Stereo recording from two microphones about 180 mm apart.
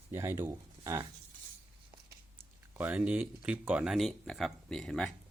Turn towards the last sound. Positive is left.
turn(degrees=0)  # may be behind; listen again after turning